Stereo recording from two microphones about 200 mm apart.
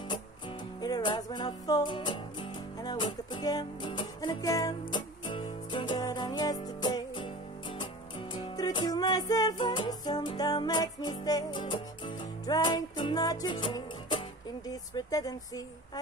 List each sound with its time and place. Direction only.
0.7 s music: 20° left (ahead or behind)
14.7 s speech: 20° left (ahead or behind)